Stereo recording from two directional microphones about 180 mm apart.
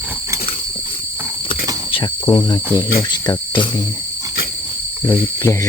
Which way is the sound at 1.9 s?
25° left (ahead or behind).